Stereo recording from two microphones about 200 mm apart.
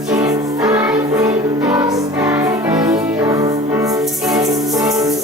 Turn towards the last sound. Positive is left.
turn(degrees=-20)  # may be behind; listen again after turning